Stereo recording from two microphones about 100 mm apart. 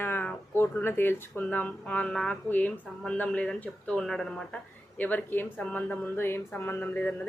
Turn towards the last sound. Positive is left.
turn(degrees=20)  # may be behind; listen again after turning